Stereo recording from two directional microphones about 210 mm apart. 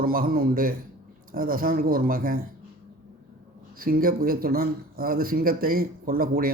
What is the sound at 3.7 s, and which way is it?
Speech, 45° right (ahead or behind).